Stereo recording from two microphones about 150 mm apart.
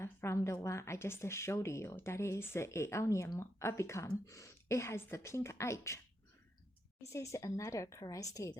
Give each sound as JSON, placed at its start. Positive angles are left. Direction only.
{"t": 0.0, "sound": "a woman's voice", "side_deg": 20}
{"t": 7.1, "sound": "a woman's voice", "side_deg": 20}